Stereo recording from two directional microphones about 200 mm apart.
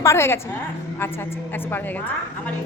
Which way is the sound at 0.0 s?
15° left (ahead or behind).